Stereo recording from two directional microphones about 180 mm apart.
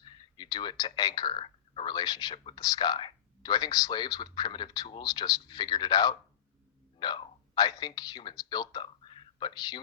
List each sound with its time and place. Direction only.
0.3 s speech: 25° left (ahead or behind)